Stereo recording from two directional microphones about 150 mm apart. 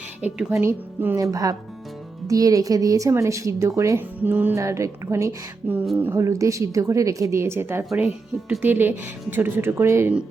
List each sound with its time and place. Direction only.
0.2 s a woman's voice: 5° right (ahead or behind)
0.6 s speech: 15° right (ahead or behind)